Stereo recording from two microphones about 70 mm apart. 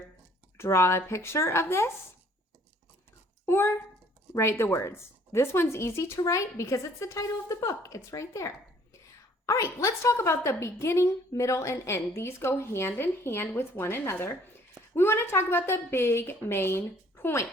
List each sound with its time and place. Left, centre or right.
0.5 s a woman's voice: left
3.4 s a child's voice: left